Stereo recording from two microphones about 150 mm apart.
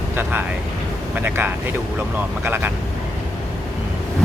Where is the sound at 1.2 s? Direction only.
10° right (ahead or behind).